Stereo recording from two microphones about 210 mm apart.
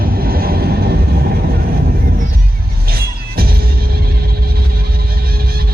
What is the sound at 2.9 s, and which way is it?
Music, 45° right (ahead or behind).